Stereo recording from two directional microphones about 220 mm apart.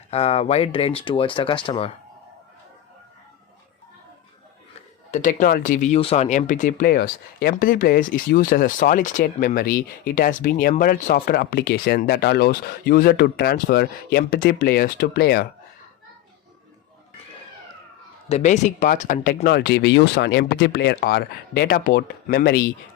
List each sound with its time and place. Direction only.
0.1 s speech: 25° left (ahead or behind)
5.1 s speech: 35° left (ahead or behind)
18.3 s speech: 30° left (ahead or behind)